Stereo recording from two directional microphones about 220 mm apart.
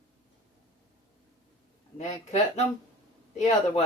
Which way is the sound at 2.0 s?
30° left (ahead or behind).